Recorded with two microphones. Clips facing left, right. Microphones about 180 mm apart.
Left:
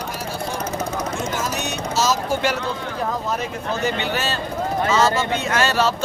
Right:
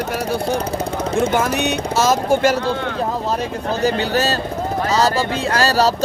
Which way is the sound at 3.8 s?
40° right (ahead or behind).